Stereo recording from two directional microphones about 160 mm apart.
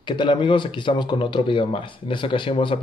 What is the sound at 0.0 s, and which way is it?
Speech, 30° left (ahead or behind).